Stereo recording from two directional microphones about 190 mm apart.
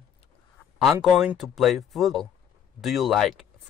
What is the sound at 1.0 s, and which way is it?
Speech, centre (ahead or behind).